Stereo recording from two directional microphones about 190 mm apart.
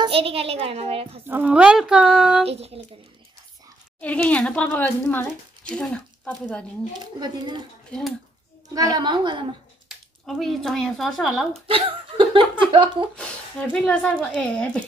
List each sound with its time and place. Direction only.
0.0 s a child's voice: 30° right (ahead or behind)
1.2 s a woman's voice: 10° right (ahead or behind)
2.4 s a child's voice: 30° right (ahead or behind)
4.0 s speech: 10° left (ahead or behind)
7.2 s speech: 20° right (ahead or behind)
8.7 s speech: 20° right (ahead or behind)
9.8 s speech: centre (ahead or behind)
11.6 s speech: 25° right (ahead or behind)
13.1 s a woman's voice: 5° left (ahead or behind)